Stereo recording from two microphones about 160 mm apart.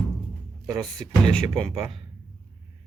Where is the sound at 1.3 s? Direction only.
Centre (ahead or behind).